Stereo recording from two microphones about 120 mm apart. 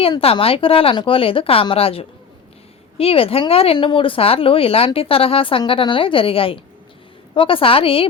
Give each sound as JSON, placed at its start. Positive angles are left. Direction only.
{"t": 0.2, "sound": "speech", "side_deg": 55}